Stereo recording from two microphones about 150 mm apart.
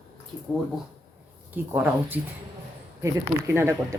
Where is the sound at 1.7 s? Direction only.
15° right (ahead or behind).